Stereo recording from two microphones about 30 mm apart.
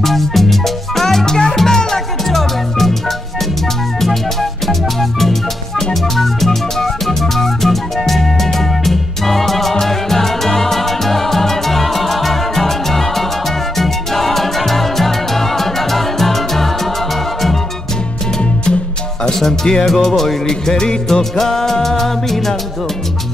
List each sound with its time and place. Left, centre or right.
0.0 s music: centre
2.2 s music: centre
4.0 s music: centre
19.4 s music: centre
20.4 s music: left